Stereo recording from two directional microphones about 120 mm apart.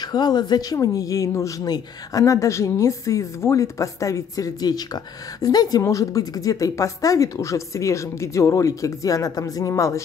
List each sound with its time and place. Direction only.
0.0 s speech: 35° left (ahead or behind)